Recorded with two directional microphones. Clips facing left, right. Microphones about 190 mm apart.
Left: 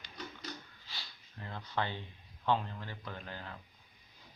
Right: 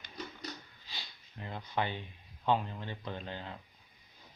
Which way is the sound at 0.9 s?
15° right (ahead or behind).